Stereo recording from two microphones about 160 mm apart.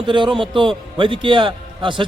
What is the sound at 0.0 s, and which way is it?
A man's voice, 30° right (ahead or behind).